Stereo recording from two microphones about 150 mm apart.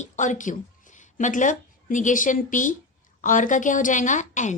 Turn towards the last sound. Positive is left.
turn(degrees=55)  # may be behind; listen again after turning